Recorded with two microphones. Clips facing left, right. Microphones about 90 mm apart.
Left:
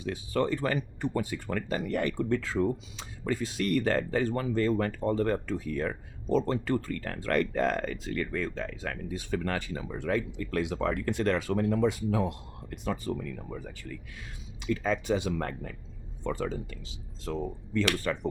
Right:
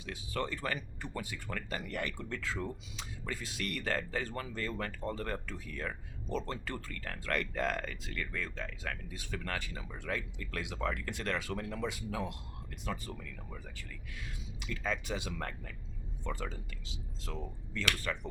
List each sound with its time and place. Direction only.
0.0 s speech: 35° left (ahead or behind)
17.3 s speech: 40° left (ahead or behind)